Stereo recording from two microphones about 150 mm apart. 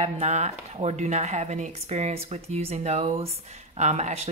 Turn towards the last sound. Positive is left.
turn(degrees=-45)  # may be behind; listen again after turning